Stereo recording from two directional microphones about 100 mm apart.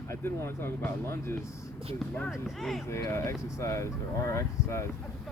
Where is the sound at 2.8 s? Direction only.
30° left (ahead or behind).